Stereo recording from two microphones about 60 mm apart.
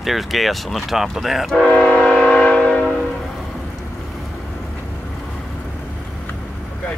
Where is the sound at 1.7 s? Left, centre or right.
Left.